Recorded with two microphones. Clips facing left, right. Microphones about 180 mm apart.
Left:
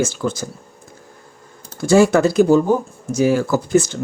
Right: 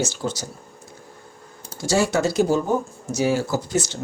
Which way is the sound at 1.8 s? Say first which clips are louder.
Left 8 dB; 55° left (ahead or behind).